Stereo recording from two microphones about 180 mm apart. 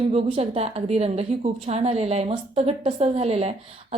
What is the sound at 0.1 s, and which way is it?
Speech, 35° right (ahead or behind).